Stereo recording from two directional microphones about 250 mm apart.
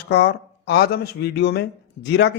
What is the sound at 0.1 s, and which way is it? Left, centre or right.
Speech, left.